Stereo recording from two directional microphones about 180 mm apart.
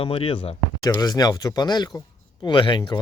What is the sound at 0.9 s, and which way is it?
Speech, 20° left (ahead or behind).